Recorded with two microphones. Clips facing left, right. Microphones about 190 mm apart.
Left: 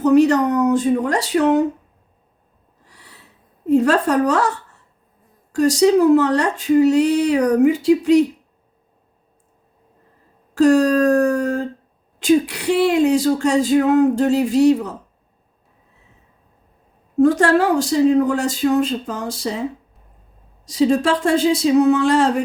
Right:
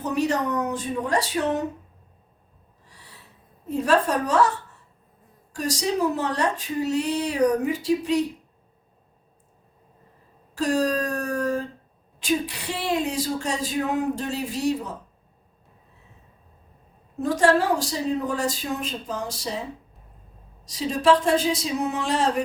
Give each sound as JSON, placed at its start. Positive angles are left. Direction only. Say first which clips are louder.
{"t": 0.0, "sound": "speech", "louder": "left 11 dB", "side_deg": 70}
{"t": 3.7, "sound": "speech", "louder": "left 6 dB", "side_deg": 70}
{"t": 5.5, "sound": "speech", "louder": "left 12 dB", "side_deg": 75}
{"t": 10.5, "sound": "a sound", "louder": "left 10 dB", "side_deg": 70}
{"t": 12.2, "sound": "speech", "louder": "left 10 dB", "side_deg": 70}
{"t": 17.2, "sound": "a woman's voice", "louder": "left 6 dB", "side_deg": 70}
{"t": 20.7, "sound": "speech", "louder": "left 4 dB", "side_deg": 70}